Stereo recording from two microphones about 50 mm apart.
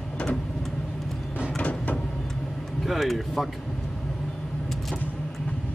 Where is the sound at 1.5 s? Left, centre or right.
Left.